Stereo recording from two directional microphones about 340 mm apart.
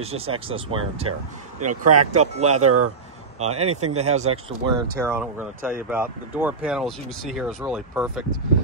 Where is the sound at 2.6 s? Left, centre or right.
Right.